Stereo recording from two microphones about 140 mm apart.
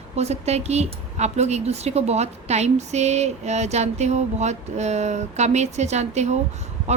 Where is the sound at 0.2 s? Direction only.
50° right (ahead or behind).